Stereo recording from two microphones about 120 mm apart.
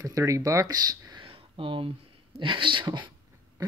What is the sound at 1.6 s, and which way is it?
Speech, 50° right (ahead or behind).